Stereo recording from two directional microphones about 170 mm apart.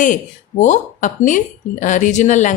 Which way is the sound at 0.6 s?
45° left (ahead or behind).